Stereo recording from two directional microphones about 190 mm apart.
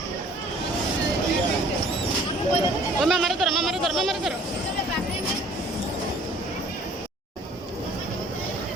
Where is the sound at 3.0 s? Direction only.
Centre (ahead or behind).